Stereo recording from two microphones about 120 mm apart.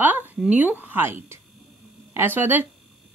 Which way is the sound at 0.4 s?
10° right (ahead or behind).